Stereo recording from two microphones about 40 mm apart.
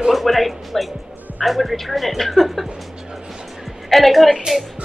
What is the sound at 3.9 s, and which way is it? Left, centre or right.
Speech, centre.